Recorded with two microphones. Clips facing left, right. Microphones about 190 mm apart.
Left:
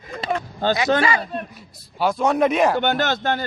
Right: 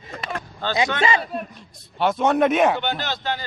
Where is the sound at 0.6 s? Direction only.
45° left (ahead or behind).